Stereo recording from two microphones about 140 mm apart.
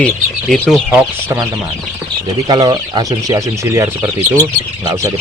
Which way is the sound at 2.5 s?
30° right (ahead or behind).